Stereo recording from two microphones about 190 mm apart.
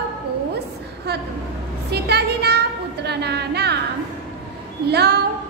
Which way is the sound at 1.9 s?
60° right (ahead or behind).